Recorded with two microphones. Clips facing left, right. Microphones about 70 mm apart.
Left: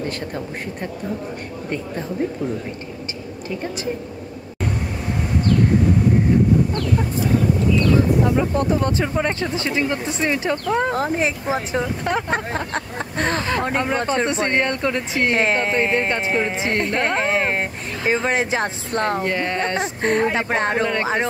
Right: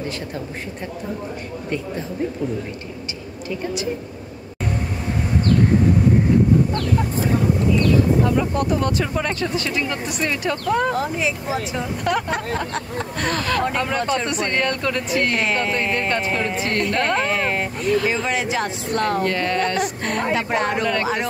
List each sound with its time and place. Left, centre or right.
8.3 s speech: left
11.0 s speech: left